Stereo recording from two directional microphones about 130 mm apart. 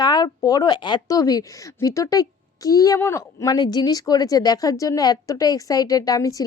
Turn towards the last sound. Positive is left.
turn(degrees=25)  # may be behind; listen again after turning